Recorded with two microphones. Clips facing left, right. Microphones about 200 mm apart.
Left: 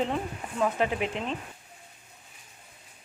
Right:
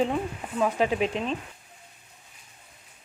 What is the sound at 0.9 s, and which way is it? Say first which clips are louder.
Speech: right 4 dB; 20° right (ahead or behind).